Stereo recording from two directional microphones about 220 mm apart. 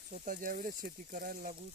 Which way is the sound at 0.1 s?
40° right (ahead or behind).